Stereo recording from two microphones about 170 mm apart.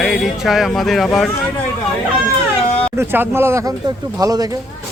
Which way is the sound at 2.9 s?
10° right (ahead or behind).